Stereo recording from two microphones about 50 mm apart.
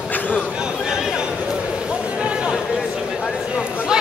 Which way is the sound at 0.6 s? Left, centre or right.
Centre.